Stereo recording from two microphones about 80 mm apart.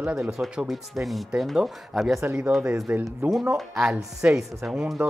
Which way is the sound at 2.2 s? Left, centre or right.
Right.